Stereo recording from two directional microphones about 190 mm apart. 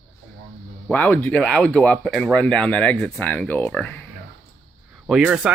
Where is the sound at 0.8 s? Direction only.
10° left (ahead or behind).